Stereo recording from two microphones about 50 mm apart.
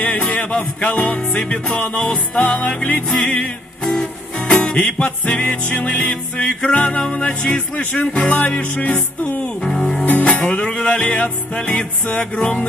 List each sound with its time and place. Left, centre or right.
0.0 s music: left
4.8 s music: left